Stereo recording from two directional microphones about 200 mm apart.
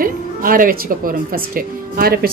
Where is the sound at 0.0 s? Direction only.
45° right (ahead or behind).